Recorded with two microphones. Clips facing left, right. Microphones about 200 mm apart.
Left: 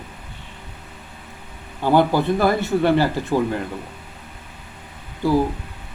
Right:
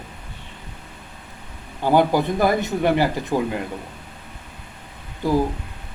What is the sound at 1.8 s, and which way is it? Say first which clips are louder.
Speech: even; 15° right (ahead or behind).